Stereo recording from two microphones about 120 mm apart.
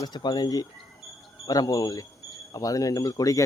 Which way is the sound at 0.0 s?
35° left (ahead or behind).